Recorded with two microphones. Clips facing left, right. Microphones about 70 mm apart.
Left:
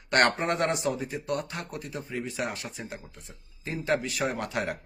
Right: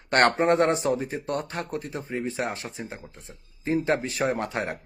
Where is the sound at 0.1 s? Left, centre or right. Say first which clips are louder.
Right 4 dB; right.